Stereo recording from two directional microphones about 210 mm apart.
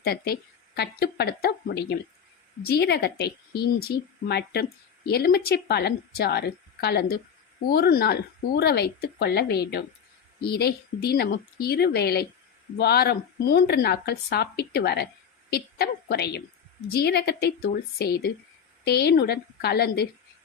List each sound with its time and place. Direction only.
0.0 s a woman's voice: 45° left (ahead or behind)